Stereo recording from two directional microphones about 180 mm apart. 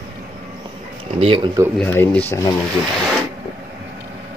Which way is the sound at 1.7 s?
10° left (ahead or behind).